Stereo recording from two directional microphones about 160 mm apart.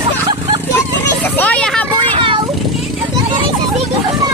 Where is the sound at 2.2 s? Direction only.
30° right (ahead or behind).